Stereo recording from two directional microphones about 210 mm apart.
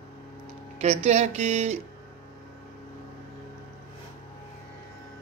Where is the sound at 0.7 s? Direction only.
30° right (ahead or behind).